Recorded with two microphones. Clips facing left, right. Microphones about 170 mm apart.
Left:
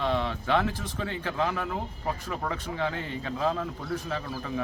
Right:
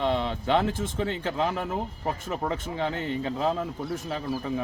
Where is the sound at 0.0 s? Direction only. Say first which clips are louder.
Right 2 dB; 20° right (ahead or behind).